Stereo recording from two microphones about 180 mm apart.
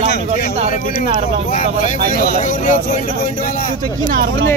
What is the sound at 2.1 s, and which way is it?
Speech, 45° left (ahead or behind).